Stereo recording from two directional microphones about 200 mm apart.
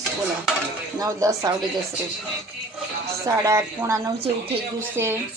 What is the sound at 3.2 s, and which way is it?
Speech, 15° right (ahead or behind).